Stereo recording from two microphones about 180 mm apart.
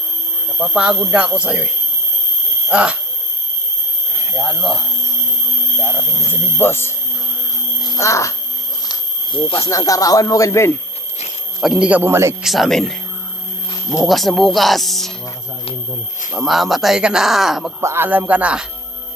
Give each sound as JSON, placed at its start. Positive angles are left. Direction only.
{"t": 0.6, "sound": "speech", "side_deg": -5}
{"t": 4.4, "sound": "speech", "side_deg": 0}
{"t": 5.8, "sound": "speech", "side_deg": 10}
{"t": 7.8, "sound": "music", "side_deg": 15}
{"t": 8.9, "sound": "speech", "side_deg": 25}
{"t": 11.6, "sound": "speech", "side_deg": -5}
{"t": 12.4, "sound": "speech", "side_deg": 0}
{"t": 14.1, "sound": "speech", "side_deg": 0}
{"t": 16.3, "sound": "speech", "side_deg": 0}
{"t": 17.7, "sound": "speech", "side_deg": -15}